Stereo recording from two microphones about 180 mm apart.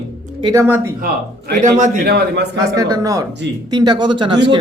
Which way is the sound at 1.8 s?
45° right (ahead or behind).